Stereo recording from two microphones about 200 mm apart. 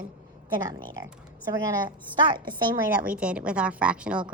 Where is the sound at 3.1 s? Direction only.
5° right (ahead or behind).